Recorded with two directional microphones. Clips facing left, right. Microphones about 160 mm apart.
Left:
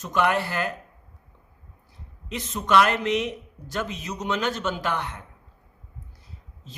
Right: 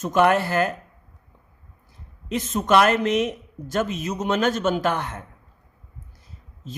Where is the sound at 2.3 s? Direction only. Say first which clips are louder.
Right 2 dB; 45° right (ahead or behind).